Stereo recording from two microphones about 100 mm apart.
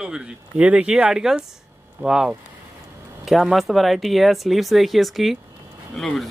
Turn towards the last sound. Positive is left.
turn(degrees=5)  # may be behind; listen again after turning